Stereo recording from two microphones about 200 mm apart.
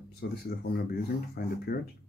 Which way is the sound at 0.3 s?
55° left (ahead or behind).